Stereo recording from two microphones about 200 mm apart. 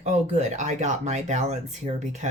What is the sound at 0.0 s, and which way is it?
Speech, 35° right (ahead or behind).